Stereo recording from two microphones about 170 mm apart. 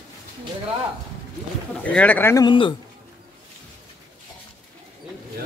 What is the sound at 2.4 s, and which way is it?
Speech, 30° left (ahead or behind).